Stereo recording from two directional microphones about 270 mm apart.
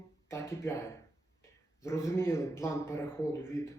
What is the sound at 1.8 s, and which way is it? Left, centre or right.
Speech, centre.